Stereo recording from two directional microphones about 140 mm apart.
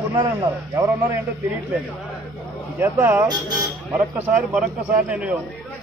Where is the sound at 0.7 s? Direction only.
20° right (ahead or behind).